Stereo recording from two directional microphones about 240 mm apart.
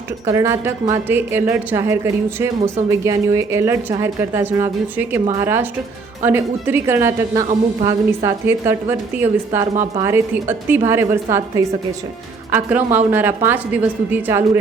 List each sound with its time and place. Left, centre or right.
0.3 s a woman's voice: centre
9.7 s a woman's voice: right
10.0 s a woman's voice: centre